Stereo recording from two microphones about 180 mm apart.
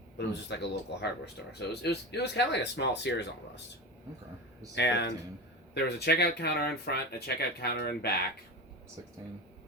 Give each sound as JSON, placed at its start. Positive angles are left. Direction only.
{"t": 0.3, "sound": "speech", "side_deg": 70}
{"t": 4.7, "sound": "speech", "side_deg": 70}